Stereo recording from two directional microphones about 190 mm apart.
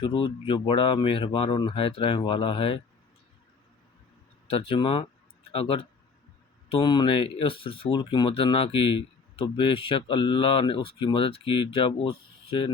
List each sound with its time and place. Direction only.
0.0 s speech: 25° left (ahead or behind)
4.4 s speech: 30° left (ahead or behind)